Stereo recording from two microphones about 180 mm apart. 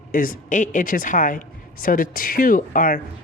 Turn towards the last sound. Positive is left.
turn(degrees=50)  # may be behind; listen again after turning